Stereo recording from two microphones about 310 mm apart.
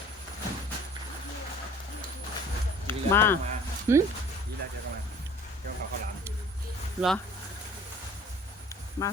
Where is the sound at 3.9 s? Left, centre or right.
Centre.